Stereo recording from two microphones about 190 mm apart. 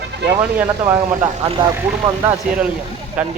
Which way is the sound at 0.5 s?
10° right (ahead or behind).